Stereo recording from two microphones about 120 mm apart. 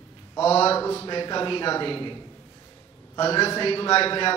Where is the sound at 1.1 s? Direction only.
40° left (ahead or behind).